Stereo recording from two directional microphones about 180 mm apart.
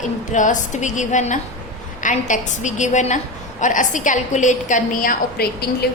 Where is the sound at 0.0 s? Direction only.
45° left (ahead or behind).